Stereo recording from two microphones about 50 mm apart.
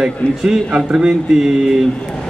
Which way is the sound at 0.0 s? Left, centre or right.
Centre.